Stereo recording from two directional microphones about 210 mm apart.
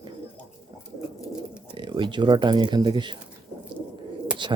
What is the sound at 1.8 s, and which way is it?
Speech, 25° right (ahead or behind).